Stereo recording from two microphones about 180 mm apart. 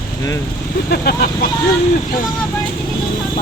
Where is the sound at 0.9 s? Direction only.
60° left (ahead or behind).